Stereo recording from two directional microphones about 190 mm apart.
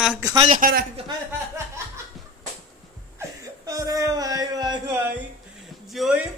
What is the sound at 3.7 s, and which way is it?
Speech, 15° right (ahead or behind).